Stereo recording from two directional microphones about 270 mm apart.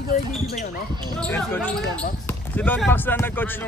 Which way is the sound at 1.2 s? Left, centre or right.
Centre.